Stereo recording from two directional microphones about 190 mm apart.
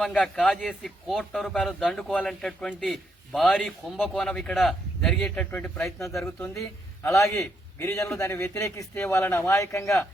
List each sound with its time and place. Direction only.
0.0 s a man's voice: 5° left (ahead or behind)